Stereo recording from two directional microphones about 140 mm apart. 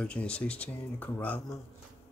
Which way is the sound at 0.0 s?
10° left (ahead or behind).